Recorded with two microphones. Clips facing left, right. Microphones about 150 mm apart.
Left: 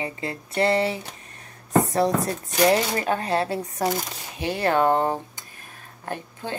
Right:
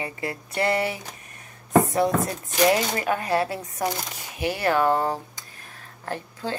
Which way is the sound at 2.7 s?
30° left (ahead or behind).